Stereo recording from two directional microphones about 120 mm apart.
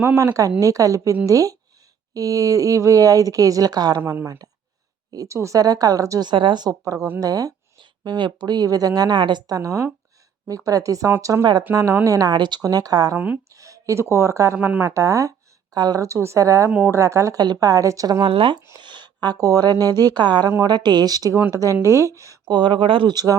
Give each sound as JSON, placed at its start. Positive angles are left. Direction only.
{"t": 0.0, "sound": "speech", "side_deg": -20}
{"t": 4.0, "sound": "a woman's voice", "side_deg": -20}
{"t": 6.2, "sound": "a woman's voice", "side_deg": -40}
{"t": 9.6, "sound": "a woman's voice", "side_deg": -25}
{"t": 13.1, "sound": "speech", "side_deg": -10}
{"t": 13.5, "sound": "a woman's voice", "side_deg": -25}
{"t": 16.6, "sound": "speech", "side_deg": -10}
{"t": 16.9, "sound": "a woman's voice", "side_deg": -25}
{"t": 18.3, "sound": "speech", "side_deg": -45}
{"t": 18.8, "sound": "a sound", "side_deg": -40}
{"t": 20.1, "sound": "a woman's voice", "side_deg": -40}